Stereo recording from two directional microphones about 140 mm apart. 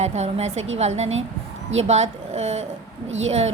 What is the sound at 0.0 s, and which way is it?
A woman's voice, 50° right (ahead or behind).